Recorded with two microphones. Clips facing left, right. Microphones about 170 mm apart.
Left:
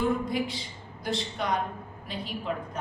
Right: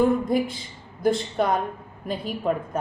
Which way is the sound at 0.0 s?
50° right (ahead or behind).